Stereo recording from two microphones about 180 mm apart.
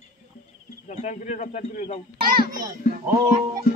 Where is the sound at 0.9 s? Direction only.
40° left (ahead or behind).